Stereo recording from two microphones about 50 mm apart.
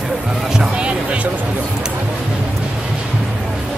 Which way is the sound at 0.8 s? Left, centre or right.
Right.